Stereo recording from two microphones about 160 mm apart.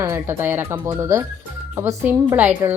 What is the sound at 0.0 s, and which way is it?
A woman's voice, 15° right (ahead or behind).